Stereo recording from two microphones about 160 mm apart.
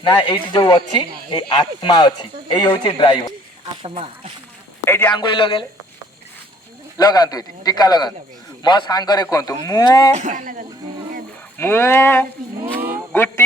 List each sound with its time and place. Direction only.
0.0 s speech: 30° left (ahead or behind)
3.8 s speech: 35° right (ahead or behind)
4.9 s speech: 15° left (ahead or behind)
5.1 s a man's voice: 30° left (ahead or behind)
6.9 s speech: 25° left (ahead or behind)
10.1 s speech: 45° right (ahead or behind)
11.5 s speech: 15° left (ahead or behind)
13.1 s music: 15° left (ahead or behind)